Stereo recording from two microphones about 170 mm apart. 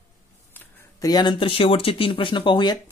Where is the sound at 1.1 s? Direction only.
25° left (ahead or behind).